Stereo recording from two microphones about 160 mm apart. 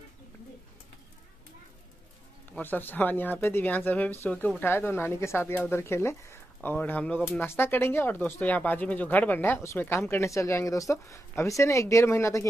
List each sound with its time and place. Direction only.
2.5 s speech: 10° left (ahead or behind)